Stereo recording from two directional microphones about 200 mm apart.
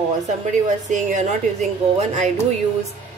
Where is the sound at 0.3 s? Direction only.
35° right (ahead or behind).